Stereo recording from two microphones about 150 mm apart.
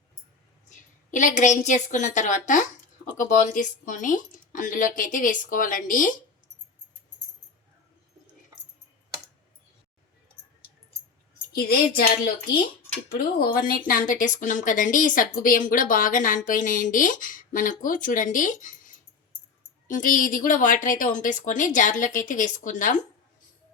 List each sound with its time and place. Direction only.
1.1 s a woman's voice: 55° left (ahead or behind)
11.5 s speech: 85° left
13.1 s speech: 75° left (ahead or behind); by 23.0 s 60° left (ahead or behind)